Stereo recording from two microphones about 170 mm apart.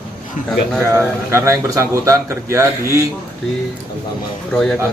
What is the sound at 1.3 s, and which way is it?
A man's voice, 15° right (ahead or behind).